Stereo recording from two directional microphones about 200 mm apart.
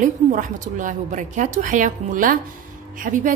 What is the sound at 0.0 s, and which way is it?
A woman's voice, 40° right (ahead or behind).